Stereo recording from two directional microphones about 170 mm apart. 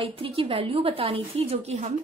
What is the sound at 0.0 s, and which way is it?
A woman's voice, 30° right (ahead or behind).